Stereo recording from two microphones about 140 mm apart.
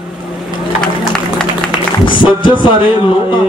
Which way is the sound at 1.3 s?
5° left (ahead or behind).